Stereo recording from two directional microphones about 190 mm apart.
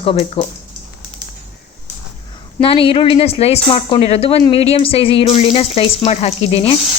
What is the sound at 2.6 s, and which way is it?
A woman's voice, 30° left (ahead or behind).